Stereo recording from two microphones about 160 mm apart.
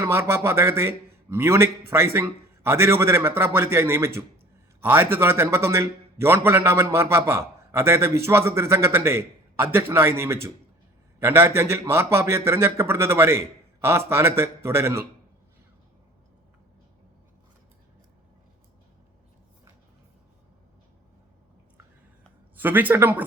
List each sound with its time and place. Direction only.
0.0 s a man's voice: 15° right (ahead or behind)
22.5 s a man's voice: 10° right (ahead or behind)